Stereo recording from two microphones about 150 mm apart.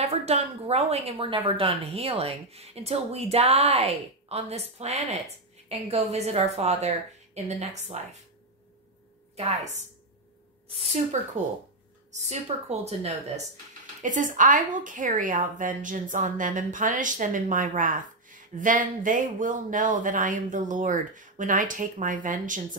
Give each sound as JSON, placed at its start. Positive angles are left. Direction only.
{"t": 0.0, "sound": "a woman's voice", "side_deg": -45}
{"t": 9.4, "sound": "a woman's voice", "side_deg": -45}
{"t": 11.1, "sound": "a woman's voice", "side_deg": -55}
{"t": 14.0, "sound": "a woman's voice", "side_deg": -60}